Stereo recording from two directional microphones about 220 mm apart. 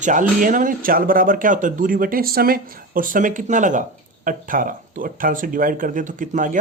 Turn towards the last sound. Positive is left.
turn(degrees=-35)  # may be behind; listen again after turning